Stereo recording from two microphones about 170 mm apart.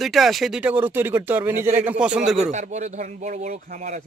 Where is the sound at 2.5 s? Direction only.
45° right (ahead or behind).